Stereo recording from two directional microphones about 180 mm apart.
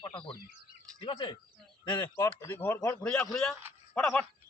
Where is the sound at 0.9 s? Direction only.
30° left (ahead or behind); by 3.2 s 5° left (ahead or behind).